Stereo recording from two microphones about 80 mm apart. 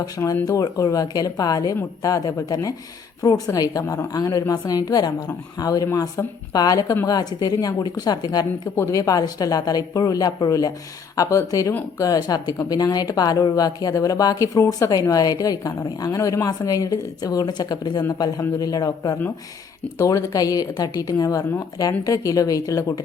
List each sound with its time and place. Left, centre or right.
0.4 s speech: left
11.2 s speech: left